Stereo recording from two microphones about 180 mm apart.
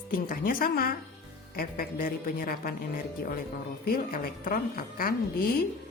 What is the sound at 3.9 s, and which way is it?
A woman's voice, 55° left (ahead or behind).